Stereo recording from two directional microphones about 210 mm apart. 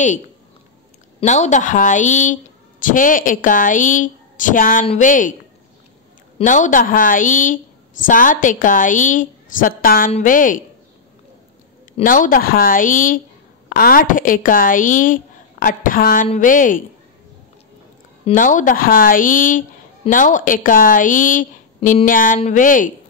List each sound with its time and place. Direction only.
1.2 s a woman's voice: 35° left (ahead or behind)
6.3 s a woman's voice: 35° left (ahead or behind)
12.0 s a woman's voice: 40° left (ahead or behind)
18.2 s a woman's voice: 40° left (ahead or behind)